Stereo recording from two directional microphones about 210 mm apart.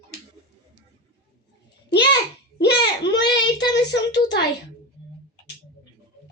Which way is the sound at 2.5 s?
55° left (ahead or behind).